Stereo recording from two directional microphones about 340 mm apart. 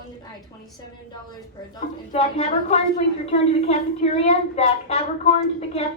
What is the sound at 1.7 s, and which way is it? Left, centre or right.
Speech, centre.